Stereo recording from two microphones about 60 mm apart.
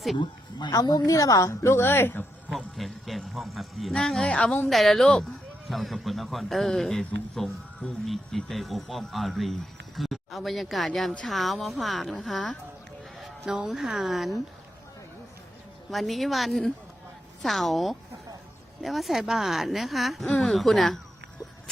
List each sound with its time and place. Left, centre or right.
0.7 s a woman's voice: left
1.6 s speech: left
2.5 s a woman's voice: centre
4.7 s a woman's voice: centre
13.1 s music: centre
13.6 s speech: centre
15.9 s speech: centre